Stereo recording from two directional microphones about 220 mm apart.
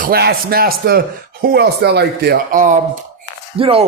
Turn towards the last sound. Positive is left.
turn(degrees=-25)  # may be behind; listen again after turning